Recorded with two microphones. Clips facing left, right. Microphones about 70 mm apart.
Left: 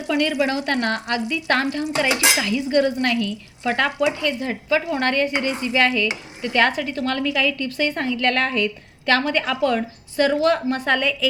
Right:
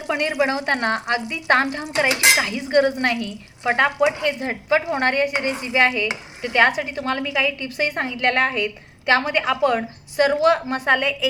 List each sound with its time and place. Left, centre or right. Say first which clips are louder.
0.1 s a woman's voice: even; right